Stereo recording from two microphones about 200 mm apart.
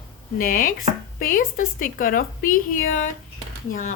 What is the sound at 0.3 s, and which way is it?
A woman's voice, 45° left (ahead or behind).